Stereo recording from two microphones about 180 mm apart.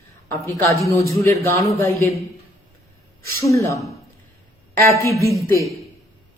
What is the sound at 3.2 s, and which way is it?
Speech, 15° left (ahead or behind).